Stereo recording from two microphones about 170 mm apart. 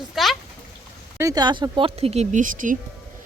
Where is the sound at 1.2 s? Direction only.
20° right (ahead or behind).